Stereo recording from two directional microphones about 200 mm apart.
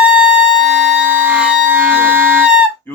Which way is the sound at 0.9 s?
5° right (ahead or behind).